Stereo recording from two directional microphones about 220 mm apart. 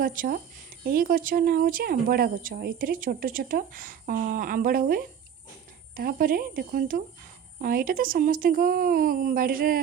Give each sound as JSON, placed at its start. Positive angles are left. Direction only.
{"t": 0.0, "sound": "speech", "side_deg": -40}